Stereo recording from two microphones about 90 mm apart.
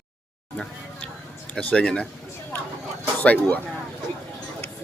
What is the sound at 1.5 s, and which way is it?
Speech, 10° left (ahead or behind).